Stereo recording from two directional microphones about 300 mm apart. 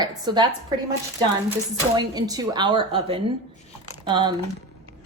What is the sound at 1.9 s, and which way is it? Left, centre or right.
A woman's voice, centre.